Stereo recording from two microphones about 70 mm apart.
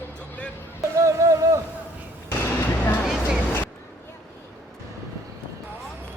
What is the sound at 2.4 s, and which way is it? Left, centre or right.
Music, left.